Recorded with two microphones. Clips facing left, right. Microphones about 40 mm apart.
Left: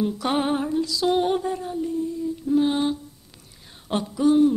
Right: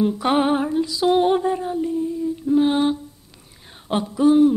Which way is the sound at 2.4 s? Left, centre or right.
Centre.